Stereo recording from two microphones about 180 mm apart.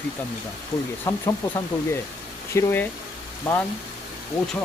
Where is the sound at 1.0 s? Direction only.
15° left (ahead or behind).